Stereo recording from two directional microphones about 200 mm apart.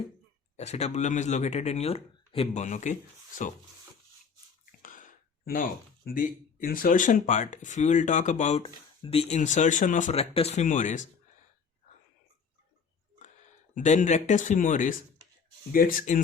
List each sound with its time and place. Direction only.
0.5 s speech: 35° left (ahead or behind)
4.6 s a sound: 40° left (ahead or behind)
6.1 s speech: 45° left (ahead or behind)
13.7 s speech: 35° left (ahead or behind)